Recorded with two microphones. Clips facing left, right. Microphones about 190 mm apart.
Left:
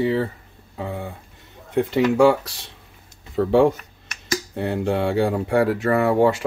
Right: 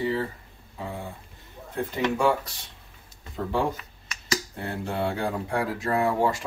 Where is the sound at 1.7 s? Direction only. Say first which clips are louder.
Left 8 dB; 90° left.